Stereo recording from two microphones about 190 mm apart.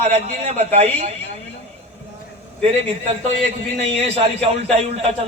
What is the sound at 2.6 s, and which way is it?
A man's voice, 35° right (ahead or behind).